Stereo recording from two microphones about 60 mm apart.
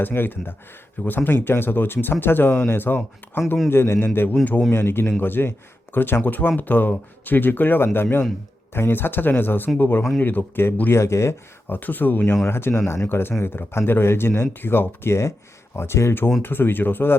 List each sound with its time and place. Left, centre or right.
0.0 s speech: left
3.7 s speech: left
10.9 s speech: left
11.7 s speech: left
16.4 s speech: left